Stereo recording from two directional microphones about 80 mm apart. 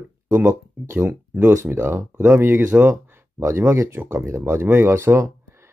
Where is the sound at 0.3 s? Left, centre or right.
Right.